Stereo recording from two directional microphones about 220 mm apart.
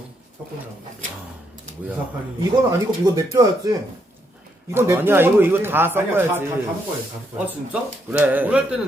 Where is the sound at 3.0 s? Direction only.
15° right (ahead or behind).